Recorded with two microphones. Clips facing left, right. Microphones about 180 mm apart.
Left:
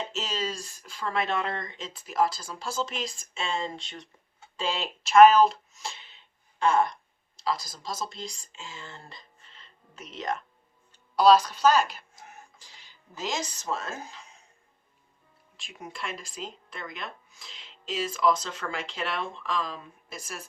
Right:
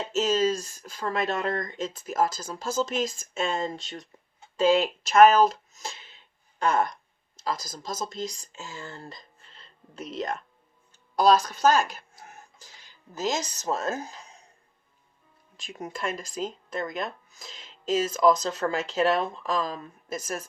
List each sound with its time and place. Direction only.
0.1 s speech: 45° right (ahead or behind)
12.2 s a sound: 45° right (ahead or behind)
13.1 s a woman's voice: 45° right (ahead or behind)
15.5 s speech: 40° right (ahead or behind)